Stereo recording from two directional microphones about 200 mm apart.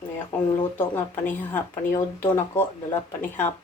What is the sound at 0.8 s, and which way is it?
Speech, 10° left (ahead or behind).